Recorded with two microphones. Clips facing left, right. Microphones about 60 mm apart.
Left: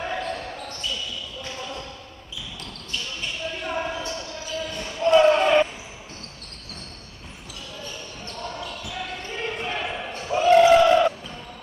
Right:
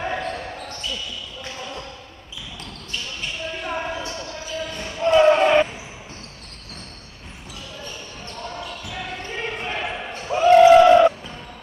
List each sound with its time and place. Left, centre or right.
0.0 s basketball bounce: centre
3.6 s basketball bounce: centre
8.5 s basketball bounce: right